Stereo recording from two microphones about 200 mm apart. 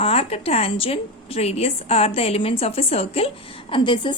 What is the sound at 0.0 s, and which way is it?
A woman's voice, 30° left (ahead or behind).